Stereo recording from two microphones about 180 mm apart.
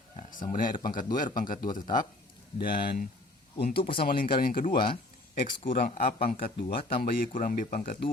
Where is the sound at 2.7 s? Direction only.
30° left (ahead or behind).